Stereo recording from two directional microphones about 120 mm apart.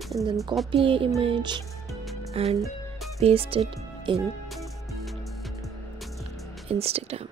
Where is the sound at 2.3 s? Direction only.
60° right (ahead or behind).